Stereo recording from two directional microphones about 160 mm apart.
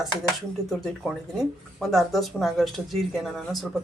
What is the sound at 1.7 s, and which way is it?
Speech, centre (ahead or behind).